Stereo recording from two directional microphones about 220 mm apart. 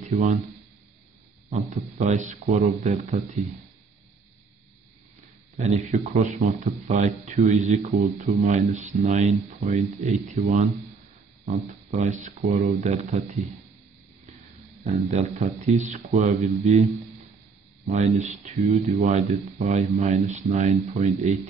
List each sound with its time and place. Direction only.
0.0 s speech: 35° right (ahead or behind)
1.5 s speech: 30° right (ahead or behind)
5.6 s speech: 30° right (ahead or behind)
11.9 s speech: 30° right (ahead or behind)
14.8 s a man's voice: 30° right (ahead or behind)
17.8 s speech: 30° right (ahead or behind)